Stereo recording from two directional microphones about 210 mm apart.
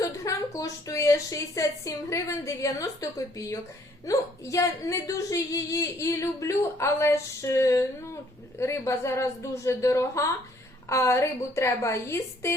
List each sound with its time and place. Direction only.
0.0 s a woman's voice: 15° left (ahead or behind)